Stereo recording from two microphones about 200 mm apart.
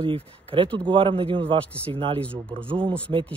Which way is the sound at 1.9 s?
25° right (ahead or behind).